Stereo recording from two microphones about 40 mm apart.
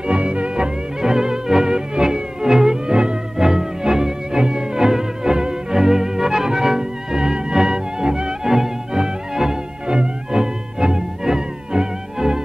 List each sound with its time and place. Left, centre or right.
0.0 s music: right
1.0 s music: centre